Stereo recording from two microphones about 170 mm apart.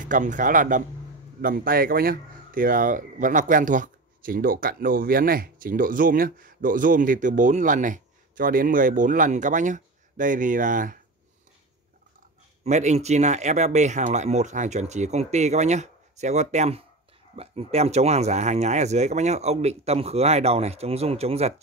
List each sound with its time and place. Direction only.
0.0 s speech: 50° right (ahead or behind)
12.6 s speech: 40° right (ahead or behind)